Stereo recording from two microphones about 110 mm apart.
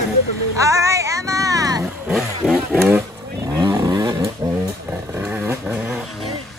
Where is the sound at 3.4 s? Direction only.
30° right (ahead or behind).